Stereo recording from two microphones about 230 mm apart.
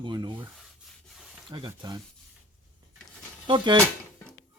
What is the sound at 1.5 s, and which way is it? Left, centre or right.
Speech, centre.